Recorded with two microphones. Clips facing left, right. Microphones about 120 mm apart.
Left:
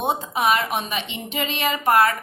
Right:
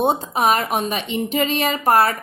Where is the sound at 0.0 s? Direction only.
35° right (ahead or behind).